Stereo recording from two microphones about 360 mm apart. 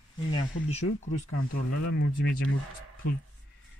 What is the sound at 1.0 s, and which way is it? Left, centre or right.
Speech, left.